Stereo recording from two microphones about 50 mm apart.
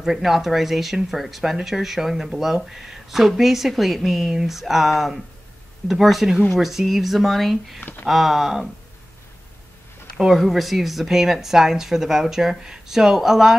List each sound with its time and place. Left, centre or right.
0.0 s speech: centre
10.1 s speech: centre